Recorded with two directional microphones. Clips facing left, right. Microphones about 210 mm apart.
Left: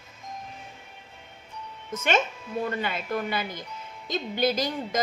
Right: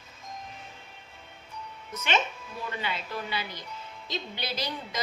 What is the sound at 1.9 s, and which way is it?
A woman's voice, 50° left (ahead or behind).